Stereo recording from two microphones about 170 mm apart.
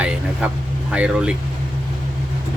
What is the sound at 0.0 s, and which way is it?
Speech, 5° right (ahead or behind).